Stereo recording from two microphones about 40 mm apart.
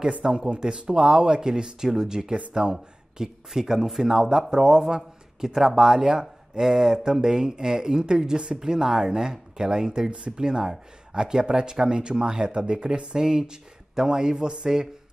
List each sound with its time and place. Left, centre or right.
0.0 s speech: centre